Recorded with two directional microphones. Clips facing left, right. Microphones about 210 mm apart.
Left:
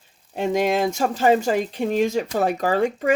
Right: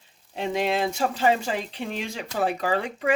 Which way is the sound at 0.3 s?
45° left (ahead or behind).